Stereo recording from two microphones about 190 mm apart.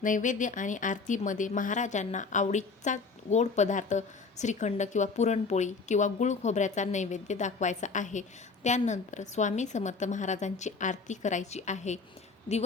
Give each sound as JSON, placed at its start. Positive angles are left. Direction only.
{"t": 0.0, "sound": "speech", "side_deg": 45}